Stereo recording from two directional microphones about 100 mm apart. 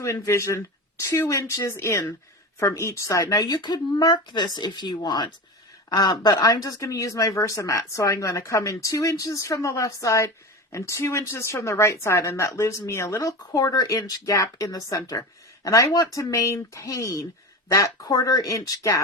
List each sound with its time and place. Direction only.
0.0 s speech: 30° left (ahead or behind)